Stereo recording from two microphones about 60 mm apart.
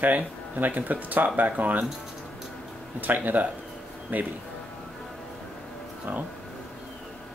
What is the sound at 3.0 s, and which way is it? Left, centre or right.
Speech, right.